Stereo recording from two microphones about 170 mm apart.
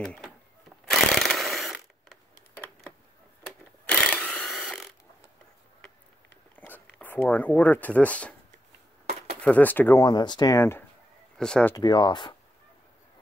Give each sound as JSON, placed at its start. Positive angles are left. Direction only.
{"t": 0.0, "sound": "speech", "side_deg": 5}
{"t": 0.8, "sound": "a sound", "side_deg": 5}
{"t": 3.4, "sound": "a sound", "side_deg": 5}
{"t": 6.5, "sound": "speech", "side_deg": 10}
{"t": 9.4, "sound": "speech", "side_deg": 10}
{"t": 10.0, "sound": "speech", "side_deg": 25}
{"t": 11.3, "sound": "speech", "side_deg": 5}
{"t": 11.7, "sound": "speech", "side_deg": 25}